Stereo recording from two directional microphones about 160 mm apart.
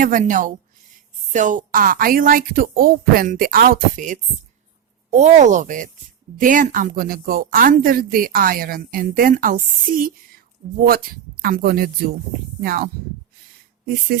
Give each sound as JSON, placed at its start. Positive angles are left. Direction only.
{"t": 0.0, "sound": "speech", "side_deg": -55}